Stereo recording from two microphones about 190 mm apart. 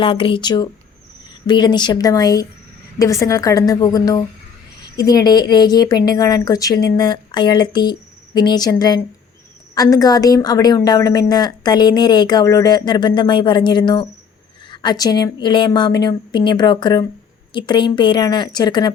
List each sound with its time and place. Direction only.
0.0 s a woman's voice: 25° left (ahead or behind)